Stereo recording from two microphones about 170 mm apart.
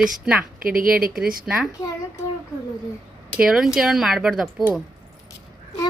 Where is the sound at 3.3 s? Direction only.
5° right (ahead or behind).